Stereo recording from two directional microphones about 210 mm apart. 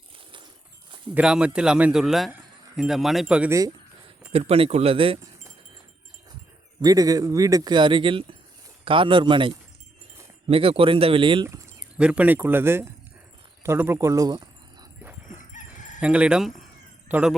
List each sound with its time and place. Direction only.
1.1 s a man's voice: 5° right (ahead or behind)
4.3 s speech: 30° right (ahead or behind)
6.8 s speech: 15° right (ahead or behind)
11.4 s speech: 15° right (ahead or behind)
16.0 s a man's voice: 5° right (ahead or behind)